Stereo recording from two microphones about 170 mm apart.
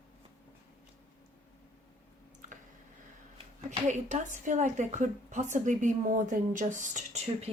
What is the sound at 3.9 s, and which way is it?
A woman's voice, 45° right (ahead or behind).